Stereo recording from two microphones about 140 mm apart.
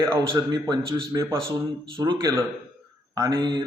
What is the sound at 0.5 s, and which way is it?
A man's voice, 30° right (ahead or behind).